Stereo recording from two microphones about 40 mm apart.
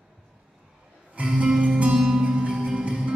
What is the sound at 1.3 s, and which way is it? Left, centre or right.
Music, right.